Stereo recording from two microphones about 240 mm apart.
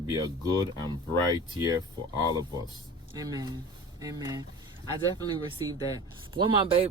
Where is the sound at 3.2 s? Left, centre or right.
Centre.